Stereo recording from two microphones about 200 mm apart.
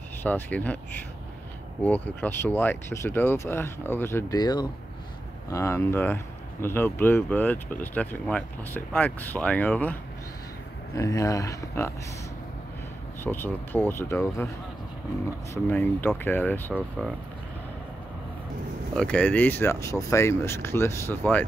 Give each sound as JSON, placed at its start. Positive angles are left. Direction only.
{"t": 0.2, "sound": "speech", "side_deg": 10}
{"t": 1.8, "sound": "speech", "side_deg": 10}
{"t": 11.0, "sound": "speech", "side_deg": 15}
{"t": 13.2, "sound": "speech", "side_deg": 10}
{"t": 18.9, "sound": "speech", "side_deg": 5}